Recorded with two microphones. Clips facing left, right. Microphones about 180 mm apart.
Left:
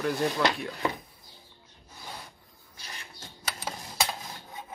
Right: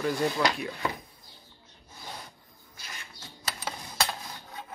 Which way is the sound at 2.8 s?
35° left (ahead or behind).